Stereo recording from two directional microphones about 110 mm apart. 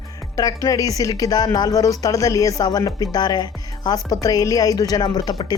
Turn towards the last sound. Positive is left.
turn(degrees=40)  # may be behind; listen again after turning